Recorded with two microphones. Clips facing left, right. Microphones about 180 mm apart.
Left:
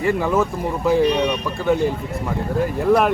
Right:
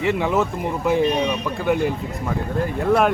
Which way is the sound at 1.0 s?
70° left (ahead or behind).